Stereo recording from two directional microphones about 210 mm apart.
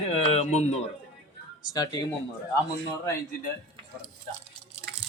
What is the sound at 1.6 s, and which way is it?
Speech, 20° left (ahead or behind).